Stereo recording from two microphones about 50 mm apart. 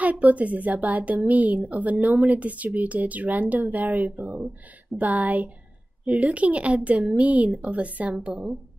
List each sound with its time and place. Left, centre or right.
0.0 s a woman's voice: right